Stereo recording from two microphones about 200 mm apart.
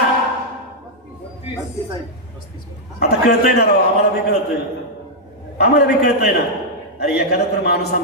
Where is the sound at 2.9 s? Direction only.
55° left (ahead or behind).